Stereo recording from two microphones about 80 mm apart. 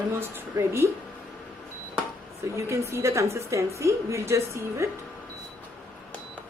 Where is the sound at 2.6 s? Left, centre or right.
Right.